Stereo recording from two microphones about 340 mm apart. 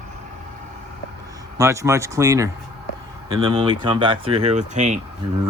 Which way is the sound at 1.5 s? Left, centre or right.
Centre.